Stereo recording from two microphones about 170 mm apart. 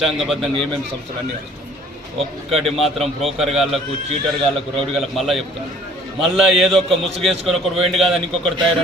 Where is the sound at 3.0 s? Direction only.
40° right (ahead or behind).